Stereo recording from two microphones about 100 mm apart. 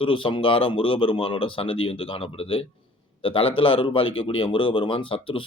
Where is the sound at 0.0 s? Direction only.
60° left (ahead or behind).